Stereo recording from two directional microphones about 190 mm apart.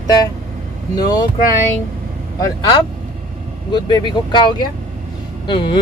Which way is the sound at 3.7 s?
25° left (ahead or behind).